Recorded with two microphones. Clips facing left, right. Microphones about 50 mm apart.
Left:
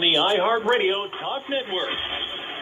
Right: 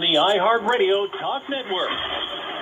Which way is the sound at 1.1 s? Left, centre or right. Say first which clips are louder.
Right 1 dB; centre.